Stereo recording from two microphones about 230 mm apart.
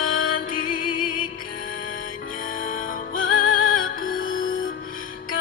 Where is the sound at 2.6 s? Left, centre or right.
Left.